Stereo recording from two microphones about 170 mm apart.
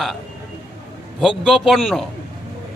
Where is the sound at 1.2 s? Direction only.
5° right (ahead or behind).